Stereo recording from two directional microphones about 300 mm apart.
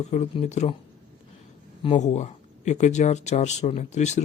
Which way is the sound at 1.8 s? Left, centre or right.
Left.